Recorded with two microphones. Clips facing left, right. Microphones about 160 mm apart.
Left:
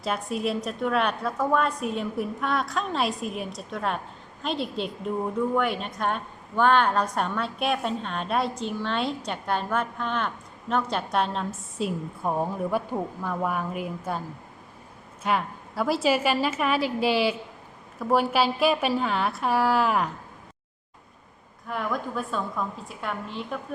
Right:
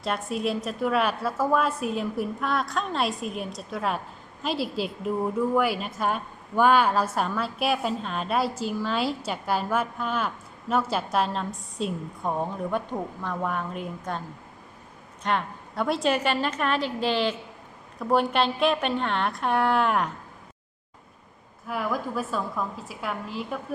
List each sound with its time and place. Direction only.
0.0 s a woman's voice: centre (ahead or behind)
15.2 s a woman's voice: 5° left (ahead or behind)
21.7 s a woman's voice: 5° right (ahead or behind)